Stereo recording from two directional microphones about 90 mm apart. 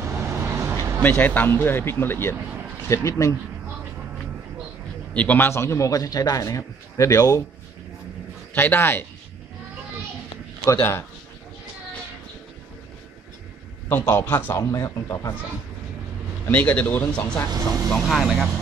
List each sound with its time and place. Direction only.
0.0 s vehicle: 30° right (ahead or behind)
1.0 s a man's voice: 20° left (ahead or behind); by 3.3 s 35° left (ahead or behind)
5.1 s a man's voice: 15° left (ahead or behind)
5.5 s a man's voice: 30° left (ahead or behind)
8.5 s speech: 25° left (ahead or behind)
10.6 s speech: 30° left (ahead or behind)
13.8 s a man's voice: 25° left (ahead or behind)
16.4 s speech: 15° left (ahead or behind)
17.9 s speech: centre (ahead or behind)